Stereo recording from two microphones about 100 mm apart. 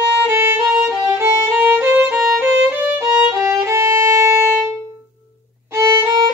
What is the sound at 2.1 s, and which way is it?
Violin, centre (ahead or behind).